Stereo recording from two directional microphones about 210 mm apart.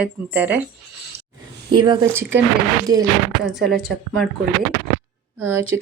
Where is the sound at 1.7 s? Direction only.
20° right (ahead or behind).